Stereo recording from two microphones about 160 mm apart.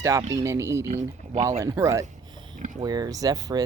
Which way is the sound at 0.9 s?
45° right (ahead or behind).